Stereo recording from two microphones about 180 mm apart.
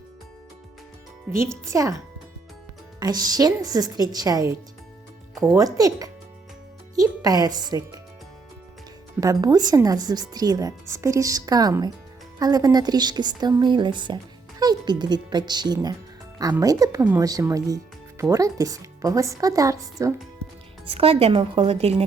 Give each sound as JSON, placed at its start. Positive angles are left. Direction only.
{"t": 1.4, "sound": "speech", "side_deg": -15}
{"t": 3.0, "sound": "speech", "side_deg": -20}
{"t": 9.2, "sound": "speech", "side_deg": -20}
{"t": 20.8, "sound": "a woman's voice", "side_deg": -30}